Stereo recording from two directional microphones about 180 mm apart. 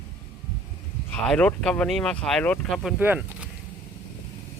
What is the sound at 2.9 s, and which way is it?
Speech, 10° right (ahead or behind).